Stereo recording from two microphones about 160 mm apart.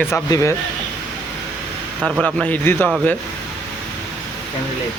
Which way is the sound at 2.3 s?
10° left (ahead or behind).